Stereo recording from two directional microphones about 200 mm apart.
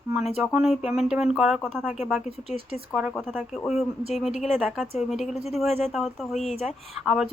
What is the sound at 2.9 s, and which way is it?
Speech, 5° right (ahead or behind).